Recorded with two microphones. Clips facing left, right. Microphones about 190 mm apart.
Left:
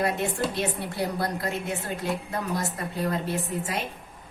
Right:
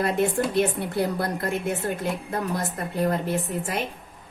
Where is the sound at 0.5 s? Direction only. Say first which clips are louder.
Right 6 dB; 50° right (ahead or behind).